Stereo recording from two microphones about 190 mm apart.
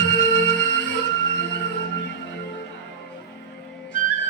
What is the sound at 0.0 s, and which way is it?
Music, 60° left (ahead or behind).